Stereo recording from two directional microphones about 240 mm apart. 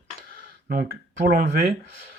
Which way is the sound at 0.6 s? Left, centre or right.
Right.